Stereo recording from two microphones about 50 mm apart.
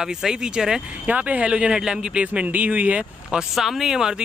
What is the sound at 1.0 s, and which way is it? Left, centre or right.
Speech, right.